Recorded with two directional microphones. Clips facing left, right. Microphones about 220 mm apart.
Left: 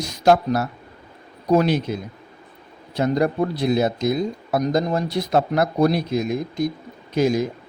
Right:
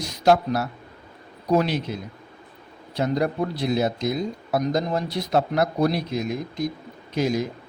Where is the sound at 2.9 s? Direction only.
50° left (ahead or behind).